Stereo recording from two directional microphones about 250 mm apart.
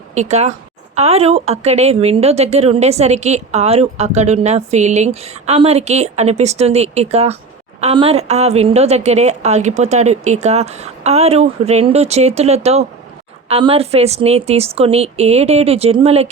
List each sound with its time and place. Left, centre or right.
0.1 s a woman's voice: right